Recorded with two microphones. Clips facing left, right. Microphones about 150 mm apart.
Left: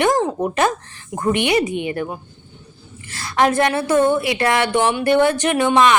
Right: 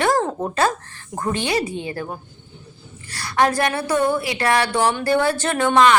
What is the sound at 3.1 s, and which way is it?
Speech, 20° left (ahead or behind).